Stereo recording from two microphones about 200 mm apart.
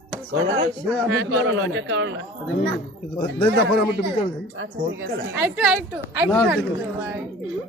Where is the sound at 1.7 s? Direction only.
65° right (ahead or behind).